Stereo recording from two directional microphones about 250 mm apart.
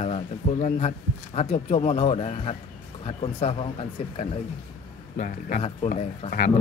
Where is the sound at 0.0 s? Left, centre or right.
Left.